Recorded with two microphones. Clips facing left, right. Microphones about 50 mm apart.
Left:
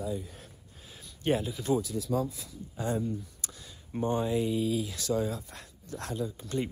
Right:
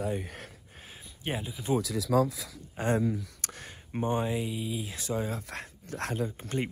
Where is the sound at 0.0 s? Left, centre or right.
Right.